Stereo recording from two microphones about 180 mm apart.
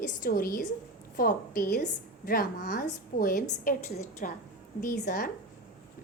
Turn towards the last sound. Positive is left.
turn(degrees=50)  # may be behind; listen again after turning